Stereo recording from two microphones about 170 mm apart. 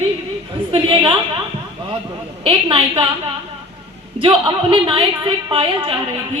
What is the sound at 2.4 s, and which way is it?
Speech, 30° right (ahead or behind).